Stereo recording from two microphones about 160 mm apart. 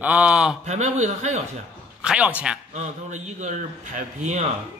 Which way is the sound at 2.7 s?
45° right (ahead or behind).